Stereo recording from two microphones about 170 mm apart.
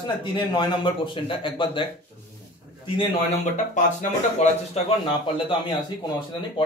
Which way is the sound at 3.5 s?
45° left (ahead or behind).